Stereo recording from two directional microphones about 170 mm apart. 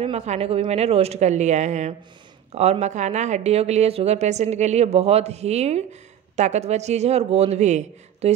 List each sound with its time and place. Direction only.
0.0 s speech: 40° right (ahead or behind)